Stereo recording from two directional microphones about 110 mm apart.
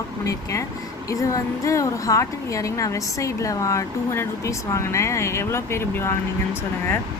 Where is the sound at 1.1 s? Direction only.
30° left (ahead or behind).